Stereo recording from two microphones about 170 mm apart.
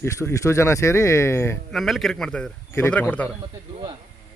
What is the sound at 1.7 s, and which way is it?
Speech, centre (ahead or behind).